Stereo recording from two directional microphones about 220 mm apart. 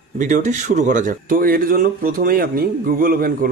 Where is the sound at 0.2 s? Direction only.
35° right (ahead or behind).